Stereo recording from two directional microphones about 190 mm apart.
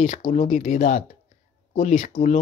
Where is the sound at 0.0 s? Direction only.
35° left (ahead or behind).